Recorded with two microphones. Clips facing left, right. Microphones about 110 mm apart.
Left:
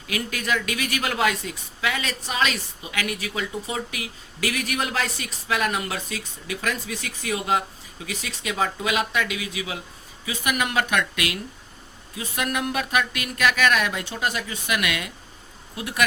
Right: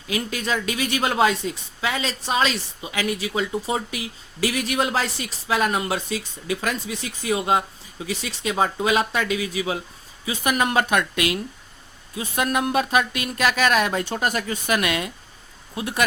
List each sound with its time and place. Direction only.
0.1 s a woman's voice: 25° right (ahead or behind)
14.0 s a woman's voice: 45° right (ahead or behind); by 16.0 s 30° right (ahead or behind)